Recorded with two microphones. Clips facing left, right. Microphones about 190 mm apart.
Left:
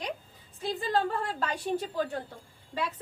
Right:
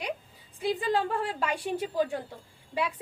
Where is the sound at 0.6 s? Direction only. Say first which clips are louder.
Right 2 dB; 10° right (ahead or behind).